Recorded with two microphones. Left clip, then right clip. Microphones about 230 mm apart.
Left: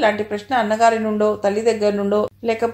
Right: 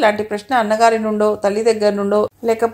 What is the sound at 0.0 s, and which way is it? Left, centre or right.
Speech, right.